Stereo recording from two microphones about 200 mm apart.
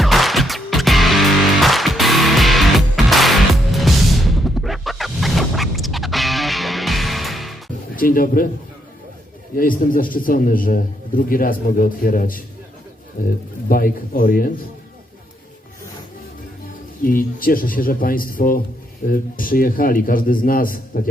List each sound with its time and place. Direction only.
0.0 s music: centre (ahead or behind)
7.9 s a man's voice: 45° left (ahead or behind)
9.6 s a man's voice: 45° left (ahead or behind)
17.0 s a man's voice: 45° left (ahead or behind)